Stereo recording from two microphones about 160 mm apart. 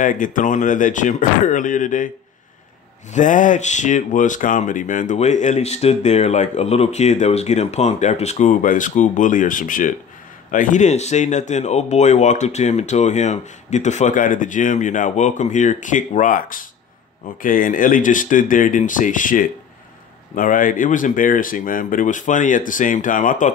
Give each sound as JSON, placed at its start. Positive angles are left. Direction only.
{"t": 0.0, "sound": "speech", "side_deg": 55}
{"t": 3.1, "sound": "speech", "side_deg": 50}